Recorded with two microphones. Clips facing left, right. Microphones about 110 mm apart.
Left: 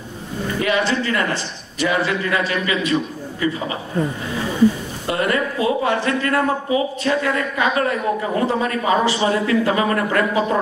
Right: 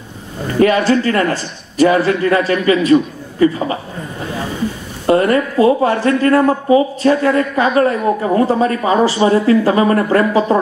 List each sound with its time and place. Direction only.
0.6 s speech: 45° right (ahead or behind)
5.0 s speech: 40° right (ahead or behind)